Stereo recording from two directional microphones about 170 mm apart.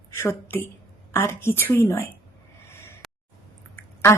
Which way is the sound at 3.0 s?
Centre (ahead or behind).